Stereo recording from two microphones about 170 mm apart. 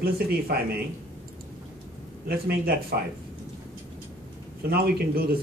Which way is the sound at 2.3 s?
65° right (ahead or behind).